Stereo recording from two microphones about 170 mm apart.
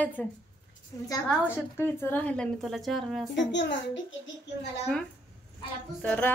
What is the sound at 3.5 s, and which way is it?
Speech, 90° left.